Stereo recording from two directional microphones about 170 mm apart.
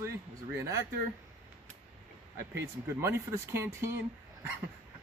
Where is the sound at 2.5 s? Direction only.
15° right (ahead or behind).